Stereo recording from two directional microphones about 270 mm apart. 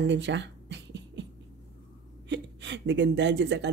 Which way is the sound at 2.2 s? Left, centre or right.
Right.